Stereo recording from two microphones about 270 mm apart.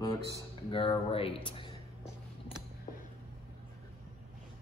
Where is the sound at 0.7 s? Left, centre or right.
Centre.